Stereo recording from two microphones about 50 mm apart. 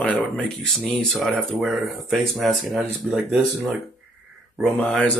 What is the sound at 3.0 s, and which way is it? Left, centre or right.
Speech, right.